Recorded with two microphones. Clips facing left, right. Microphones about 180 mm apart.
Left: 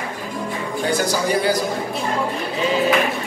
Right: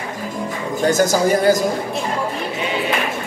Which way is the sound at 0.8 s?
45° right (ahead or behind).